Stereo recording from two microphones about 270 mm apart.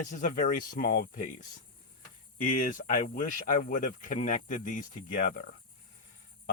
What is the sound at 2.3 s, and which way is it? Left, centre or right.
Speech, left.